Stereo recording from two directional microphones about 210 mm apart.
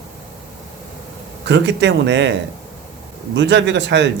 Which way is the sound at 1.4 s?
55° right (ahead or behind).